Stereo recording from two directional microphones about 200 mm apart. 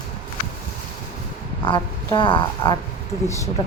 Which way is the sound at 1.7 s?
25° left (ahead or behind).